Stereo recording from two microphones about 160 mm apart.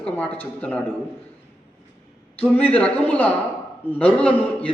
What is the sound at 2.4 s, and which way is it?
A man's voice, 10° left (ahead or behind).